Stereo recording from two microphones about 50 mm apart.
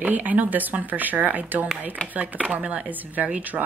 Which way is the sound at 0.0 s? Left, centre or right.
Right.